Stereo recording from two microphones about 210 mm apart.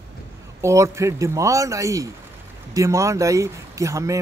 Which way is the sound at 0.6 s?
15° right (ahead or behind).